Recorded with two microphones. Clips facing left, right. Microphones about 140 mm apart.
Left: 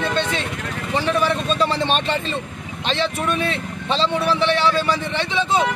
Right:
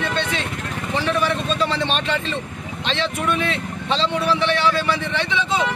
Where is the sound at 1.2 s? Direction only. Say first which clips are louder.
Left 2 dB; 40° left (ahead or behind).